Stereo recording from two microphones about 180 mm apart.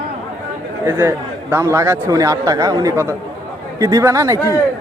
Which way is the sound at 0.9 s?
15° right (ahead or behind).